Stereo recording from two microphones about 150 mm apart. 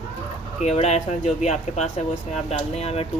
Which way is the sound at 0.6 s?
50° left (ahead or behind).